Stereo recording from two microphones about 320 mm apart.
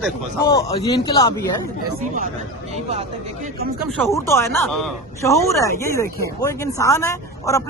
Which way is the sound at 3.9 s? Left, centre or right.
Centre.